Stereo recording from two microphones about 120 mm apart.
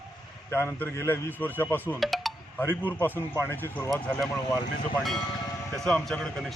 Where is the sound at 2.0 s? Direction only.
Centre (ahead or behind).